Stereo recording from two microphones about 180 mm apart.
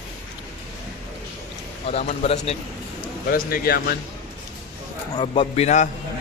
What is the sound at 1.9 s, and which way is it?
Speech, 35° left (ahead or behind).